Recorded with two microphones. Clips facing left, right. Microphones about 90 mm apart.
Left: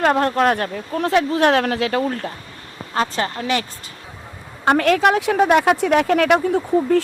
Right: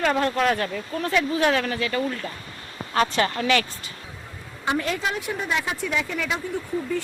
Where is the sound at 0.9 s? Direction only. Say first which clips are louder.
Left 6 dB; 75° left (ahead or behind).